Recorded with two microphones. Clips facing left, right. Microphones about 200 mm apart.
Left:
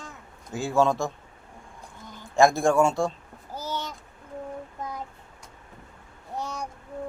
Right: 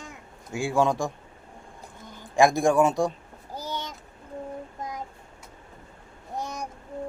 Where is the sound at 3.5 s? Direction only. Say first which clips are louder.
Left 1 dB; 15° right (ahead or behind).